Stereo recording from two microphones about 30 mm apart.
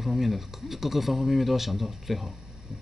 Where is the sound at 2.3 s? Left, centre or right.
Centre.